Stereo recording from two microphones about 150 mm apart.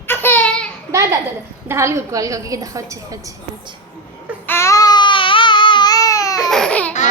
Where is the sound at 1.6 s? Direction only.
20° right (ahead or behind).